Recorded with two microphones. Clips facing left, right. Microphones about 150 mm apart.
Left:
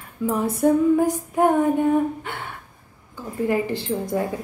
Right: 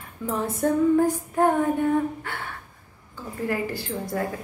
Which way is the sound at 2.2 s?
20° left (ahead or behind).